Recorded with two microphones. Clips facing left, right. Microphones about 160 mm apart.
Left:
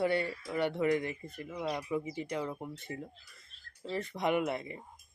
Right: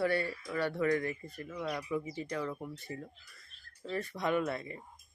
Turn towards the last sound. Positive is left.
turn(degrees=20)  # may be behind; listen again after turning